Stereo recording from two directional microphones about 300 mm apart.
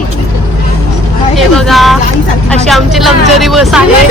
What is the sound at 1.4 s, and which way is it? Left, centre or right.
Vehicle, centre.